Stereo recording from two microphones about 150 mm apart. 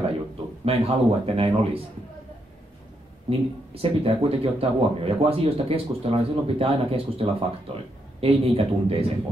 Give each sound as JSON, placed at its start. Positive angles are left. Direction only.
{"t": 0.7, "sound": "a man's voice", "side_deg": -40}
{"t": 3.3, "sound": "a man's voice", "side_deg": -40}